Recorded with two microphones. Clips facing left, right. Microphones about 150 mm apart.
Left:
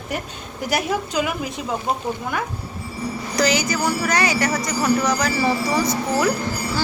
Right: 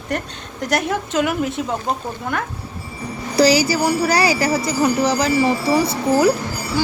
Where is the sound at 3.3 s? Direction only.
35° right (ahead or behind).